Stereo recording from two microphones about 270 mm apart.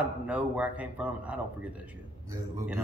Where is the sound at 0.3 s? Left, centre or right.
Centre.